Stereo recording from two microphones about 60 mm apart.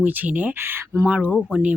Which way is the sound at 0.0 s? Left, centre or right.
Right.